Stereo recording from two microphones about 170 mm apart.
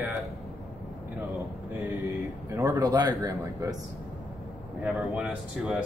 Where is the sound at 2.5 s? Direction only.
20° right (ahead or behind).